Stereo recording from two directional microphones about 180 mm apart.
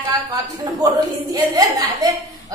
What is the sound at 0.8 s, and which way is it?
A woman's voice, 20° right (ahead or behind).